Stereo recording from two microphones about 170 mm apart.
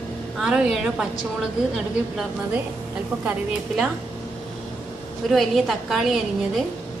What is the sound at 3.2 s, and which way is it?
Speech, 5° right (ahead or behind).